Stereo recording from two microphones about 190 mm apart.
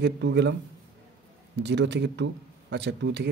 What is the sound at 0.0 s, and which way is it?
Speech, 65° right (ahead or behind).